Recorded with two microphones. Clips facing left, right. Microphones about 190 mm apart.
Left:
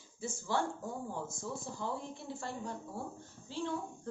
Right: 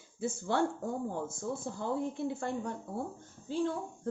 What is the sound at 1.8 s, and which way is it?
A woman's voice, 55° right (ahead or behind).